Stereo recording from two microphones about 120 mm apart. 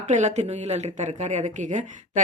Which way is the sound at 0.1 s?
75° right (ahead or behind).